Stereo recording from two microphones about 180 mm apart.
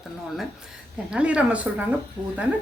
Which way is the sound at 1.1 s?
5° right (ahead or behind).